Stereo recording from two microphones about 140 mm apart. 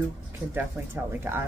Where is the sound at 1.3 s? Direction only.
15° right (ahead or behind).